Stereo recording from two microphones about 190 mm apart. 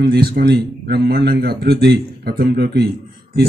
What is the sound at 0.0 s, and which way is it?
Speech, 55° right (ahead or behind).